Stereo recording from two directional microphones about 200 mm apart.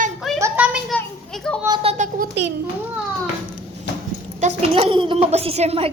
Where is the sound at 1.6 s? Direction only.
20° right (ahead or behind).